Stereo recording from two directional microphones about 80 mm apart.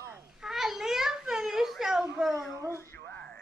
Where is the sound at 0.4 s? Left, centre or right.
Centre.